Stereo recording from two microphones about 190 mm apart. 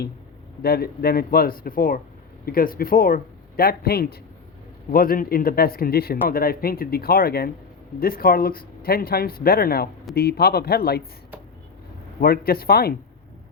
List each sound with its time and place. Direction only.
0.6 s speech: 55° left (ahead or behind)
12.2 s speech: 55° left (ahead or behind)